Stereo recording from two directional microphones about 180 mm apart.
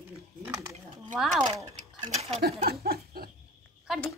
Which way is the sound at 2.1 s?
35° right (ahead or behind).